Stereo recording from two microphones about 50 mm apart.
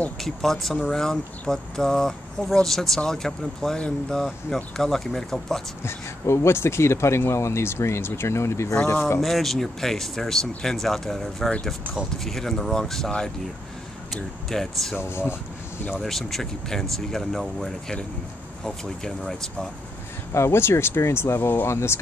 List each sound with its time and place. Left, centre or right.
0.2 s speech: centre
3.7 s speech: left
4.7 s speech: centre
5.9 s speech: left
9.2 s speech: centre
14.1 s speech: centre
15.0 s speech: left
16.0 s speech: centre
20.3 s speech: left